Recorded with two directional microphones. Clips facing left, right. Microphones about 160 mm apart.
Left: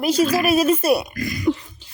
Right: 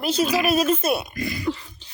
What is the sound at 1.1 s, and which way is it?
Speech, 25° right (ahead or behind).